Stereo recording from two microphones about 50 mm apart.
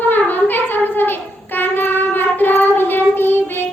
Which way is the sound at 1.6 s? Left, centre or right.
Left.